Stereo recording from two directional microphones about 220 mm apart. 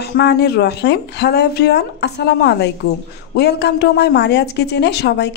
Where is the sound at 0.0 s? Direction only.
50° left (ahead or behind).